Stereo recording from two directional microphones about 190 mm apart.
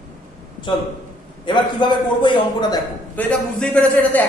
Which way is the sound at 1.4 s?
25° left (ahead or behind).